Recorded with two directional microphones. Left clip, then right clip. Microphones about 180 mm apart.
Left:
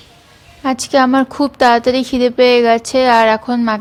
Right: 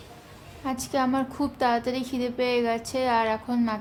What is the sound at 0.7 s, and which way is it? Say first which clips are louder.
A woman's voice: left 14 dB; 30° left (ahead or behind).